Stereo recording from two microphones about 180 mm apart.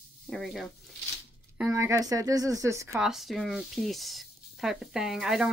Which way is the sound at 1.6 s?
15° right (ahead or behind).